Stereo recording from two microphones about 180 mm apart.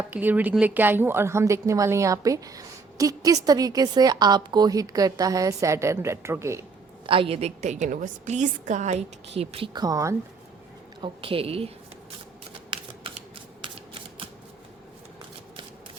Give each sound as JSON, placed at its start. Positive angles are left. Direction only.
{"t": 0.1, "sound": "a woman's voice", "side_deg": -10}
{"t": 7.1, "sound": "a woman's voice", "side_deg": -30}
{"t": 11.0, "sound": "a woman's voice", "side_deg": -30}
{"t": 13.6, "sound": "a sound", "side_deg": -30}